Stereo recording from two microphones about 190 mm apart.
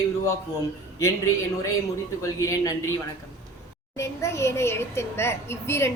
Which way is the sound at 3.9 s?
15° left (ahead or behind).